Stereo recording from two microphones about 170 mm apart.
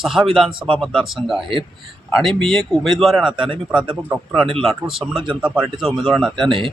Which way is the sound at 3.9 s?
5° right (ahead or behind).